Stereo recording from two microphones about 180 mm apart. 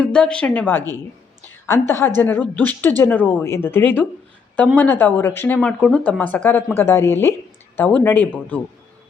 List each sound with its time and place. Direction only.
0.0 s a woman's voice: 5° left (ahead or behind)